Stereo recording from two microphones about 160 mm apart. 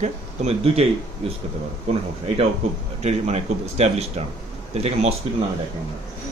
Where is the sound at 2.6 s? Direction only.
40° right (ahead or behind).